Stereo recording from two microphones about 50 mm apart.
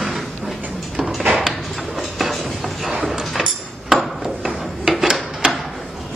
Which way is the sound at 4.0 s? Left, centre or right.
Centre.